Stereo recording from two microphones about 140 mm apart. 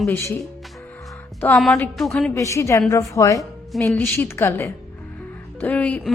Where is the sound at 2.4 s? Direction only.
20° left (ahead or behind).